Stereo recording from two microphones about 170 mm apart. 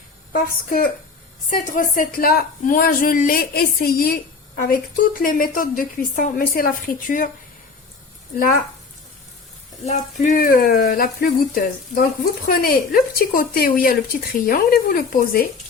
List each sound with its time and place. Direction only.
0.3 s a woman's voice: 55° left (ahead or behind)
9.8 s a woman's voice: 45° left (ahead or behind)